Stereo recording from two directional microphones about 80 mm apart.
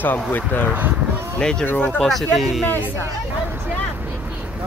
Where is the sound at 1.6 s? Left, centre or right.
Left.